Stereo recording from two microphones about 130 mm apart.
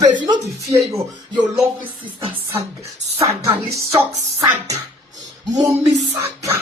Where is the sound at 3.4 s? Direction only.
25° right (ahead or behind).